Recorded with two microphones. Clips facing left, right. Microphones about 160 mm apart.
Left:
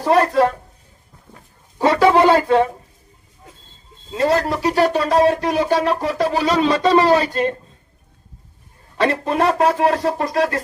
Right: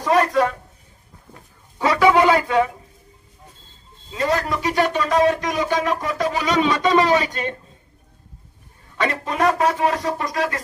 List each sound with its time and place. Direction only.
0.0 s a woman's voice: 30° left (ahead or behind)
1.8 s speech: 35° left (ahead or behind)
4.1 s speech: 35° left (ahead or behind)
9.0 s speech: 30° left (ahead or behind)